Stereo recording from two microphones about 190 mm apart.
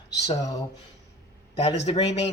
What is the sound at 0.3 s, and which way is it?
Speech, 20° left (ahead or behind).